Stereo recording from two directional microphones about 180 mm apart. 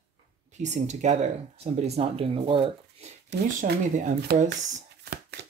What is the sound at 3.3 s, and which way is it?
Speech, 70° right (ahead or behind).